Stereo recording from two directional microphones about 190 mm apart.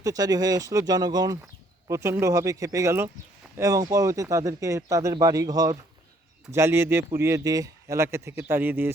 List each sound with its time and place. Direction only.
0.0 s a man's voice: 20° right (ahead or behind)